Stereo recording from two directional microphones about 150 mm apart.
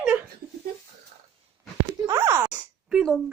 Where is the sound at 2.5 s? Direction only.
10° right (ahead or behind).